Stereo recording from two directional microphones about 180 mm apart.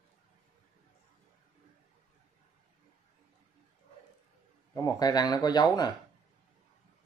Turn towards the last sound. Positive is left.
turn(degrees=20)  # may be behind; listen again after turning